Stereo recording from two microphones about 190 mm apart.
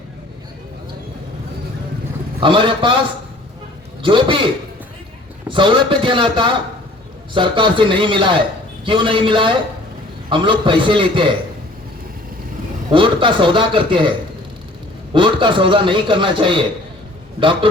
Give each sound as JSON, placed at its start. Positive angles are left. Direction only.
{"t": 2.4, "sound": "a man's voice", "side_deg": -25}
{"t": 4.0, "sound": "a man's voice", "side_deg": -25}
{"t": 12.9, "sound": "a man's voice", "side_deg": -25}
{"t": 15.1, "sound": "a man's voice", "side_deg": -25}